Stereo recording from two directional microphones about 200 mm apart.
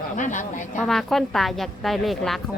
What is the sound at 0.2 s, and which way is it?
Speech, 40° left (ahead or behind).